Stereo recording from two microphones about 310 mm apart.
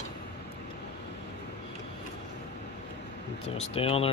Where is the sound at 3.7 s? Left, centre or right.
Centre.